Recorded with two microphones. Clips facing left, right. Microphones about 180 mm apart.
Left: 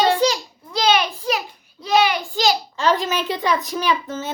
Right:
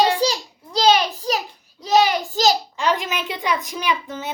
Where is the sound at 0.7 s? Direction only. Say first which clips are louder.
Right 2 dB; 35° right (ahead or behind).